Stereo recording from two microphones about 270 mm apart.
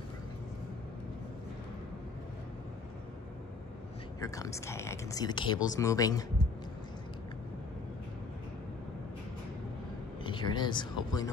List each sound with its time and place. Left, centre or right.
4.2 s speech: centre
10.2 s speech: centre